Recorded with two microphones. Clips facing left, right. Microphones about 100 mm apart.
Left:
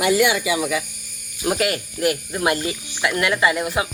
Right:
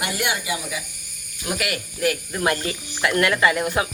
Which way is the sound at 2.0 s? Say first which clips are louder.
Even; 20° left (ahead or behind).